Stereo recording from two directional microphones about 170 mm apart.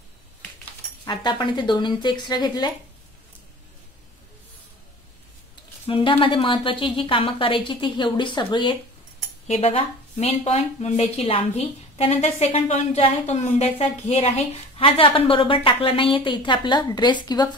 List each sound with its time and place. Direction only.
1.0 s a woman's voice: 25° left (ahead or behind)
5.9 s a woman's voice: 30° left (ahead or behind)